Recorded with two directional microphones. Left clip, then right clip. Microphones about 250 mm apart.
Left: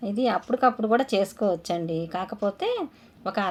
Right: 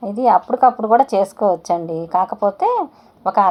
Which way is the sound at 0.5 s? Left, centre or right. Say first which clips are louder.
Right 9 dB; centre.